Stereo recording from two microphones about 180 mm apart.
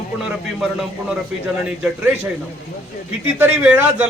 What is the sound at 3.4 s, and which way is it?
Speech, 10° right (ahead or behind).